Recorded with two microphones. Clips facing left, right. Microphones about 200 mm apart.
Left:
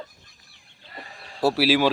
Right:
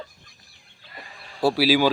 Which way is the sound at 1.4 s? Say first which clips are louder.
Right 1 dB; centre (ahead or behind).